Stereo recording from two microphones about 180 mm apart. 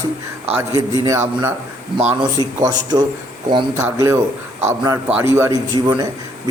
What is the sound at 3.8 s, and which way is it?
A man's voice, 15° right (ahead or behind).